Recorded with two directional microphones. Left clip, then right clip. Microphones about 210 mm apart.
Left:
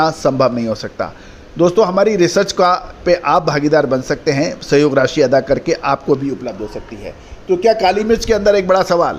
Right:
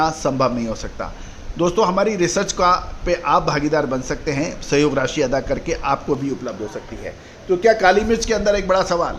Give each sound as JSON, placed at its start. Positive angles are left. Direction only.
{"t": 0.0, "sound": "a man's voice", "side_deg": 20}
{"t": 7.6, "sound": "a man's voice", "side_deg": 25}